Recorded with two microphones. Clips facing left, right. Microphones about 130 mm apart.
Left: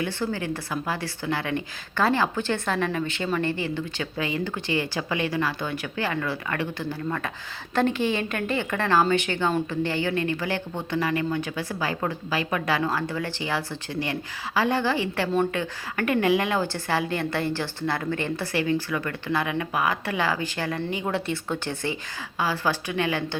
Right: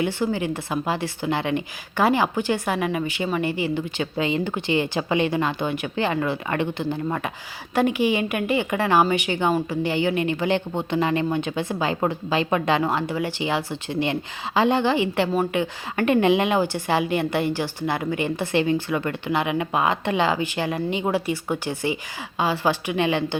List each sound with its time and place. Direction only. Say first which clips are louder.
0.0 s a woman's voice: right 4 dB; 15° right (ahead or behind)
9.8 s a woman's voice: right 3 dB; 15° right (ahead or behind)